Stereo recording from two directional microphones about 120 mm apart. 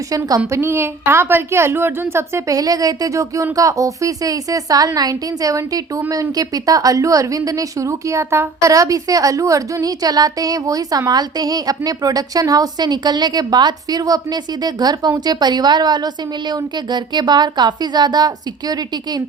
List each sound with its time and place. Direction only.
0.3 s a woman's voice: 30° right (ahead or behind)
0.6 s a woman's voice: 20° right (ahead or behind); by 18.3 s 35° right (ahead or behind)